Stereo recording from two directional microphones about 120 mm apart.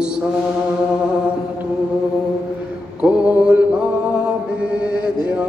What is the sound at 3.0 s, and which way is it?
Mantra, 10° right (ahead or behind).